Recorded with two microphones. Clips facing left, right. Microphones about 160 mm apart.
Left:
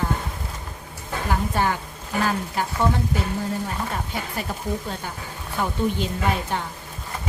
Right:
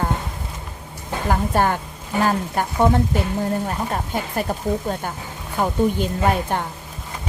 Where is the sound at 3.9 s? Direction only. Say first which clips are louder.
Right 5 dB; 45° right (ahead or behind).